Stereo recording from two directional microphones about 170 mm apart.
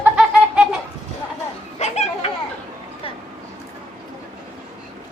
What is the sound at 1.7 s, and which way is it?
Children playing, 40° left (ahead or behind).